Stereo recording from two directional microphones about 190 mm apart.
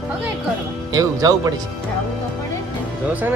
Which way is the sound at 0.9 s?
20° right (ahead or behind).